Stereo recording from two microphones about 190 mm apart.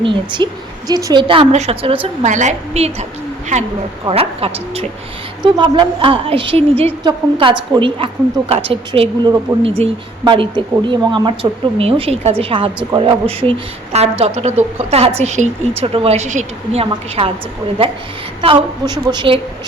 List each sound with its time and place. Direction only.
0.0 s a woman's voice: 25° right (ahead or behind)
4.1 s a woman's voice: 30° right (ahead or behind)
18.4 s a woman's voice: 25° right (ahead or behind)